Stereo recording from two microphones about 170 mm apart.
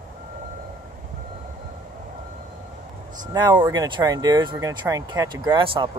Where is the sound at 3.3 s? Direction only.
25° right (ahead or behind).